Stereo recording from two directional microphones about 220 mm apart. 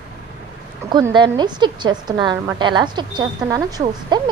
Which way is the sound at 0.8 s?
20° right (ahead or behind).